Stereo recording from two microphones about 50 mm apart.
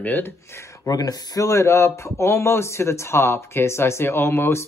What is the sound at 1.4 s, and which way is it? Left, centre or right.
A man's voice, left.